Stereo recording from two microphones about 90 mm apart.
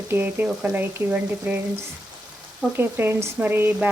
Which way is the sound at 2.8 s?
25° right (ahead or behind).